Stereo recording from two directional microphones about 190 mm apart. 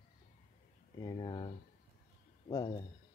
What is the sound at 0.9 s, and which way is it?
Speech, 20° left (ahead or behind).